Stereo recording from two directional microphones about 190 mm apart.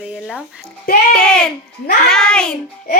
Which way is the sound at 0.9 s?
50° left (ahead or behind).